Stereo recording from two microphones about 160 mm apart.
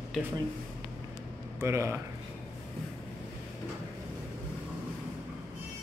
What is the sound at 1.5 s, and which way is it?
Speech, 15° right (ahead or behind).